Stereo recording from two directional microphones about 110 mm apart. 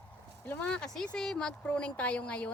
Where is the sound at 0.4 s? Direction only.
10° left (ahead or behind).